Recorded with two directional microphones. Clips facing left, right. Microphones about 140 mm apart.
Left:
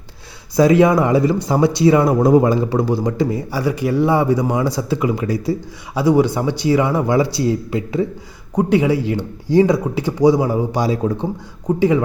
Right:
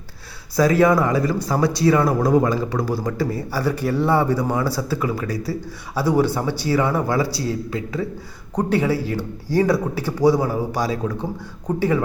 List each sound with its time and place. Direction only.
0.5 s speech: 20° left (ahead or behind)
8.5 s speech: 15° left (ahead or behind)
11.8 s speech: 15° left (ahead or behind)